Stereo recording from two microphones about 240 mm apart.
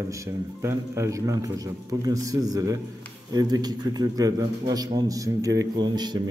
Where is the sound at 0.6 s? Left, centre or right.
Centre.